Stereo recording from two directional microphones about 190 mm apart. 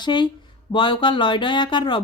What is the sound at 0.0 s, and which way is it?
Speech, 25° left (ahead or behind).